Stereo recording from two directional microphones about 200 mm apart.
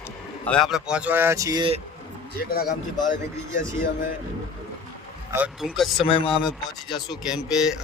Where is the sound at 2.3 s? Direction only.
50° left (ahead or behind).